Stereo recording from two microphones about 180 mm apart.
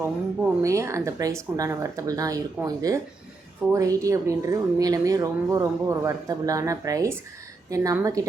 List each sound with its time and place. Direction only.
0.6 s a woman's voice: 15° right (ahead or behind)